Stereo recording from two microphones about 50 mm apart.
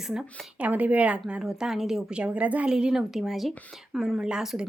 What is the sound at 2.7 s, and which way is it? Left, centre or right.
Speech, centre.